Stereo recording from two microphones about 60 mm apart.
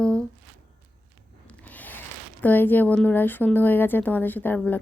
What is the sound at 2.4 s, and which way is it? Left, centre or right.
A woman's voice, left.